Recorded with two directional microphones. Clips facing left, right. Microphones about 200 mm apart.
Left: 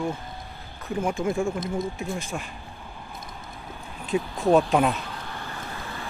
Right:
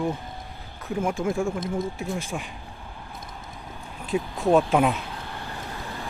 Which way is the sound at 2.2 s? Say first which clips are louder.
Right 1 dB; 10° right (ahead or behind).